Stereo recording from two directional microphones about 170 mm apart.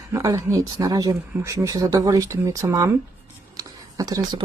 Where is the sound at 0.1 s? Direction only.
15° right (ahead or behind).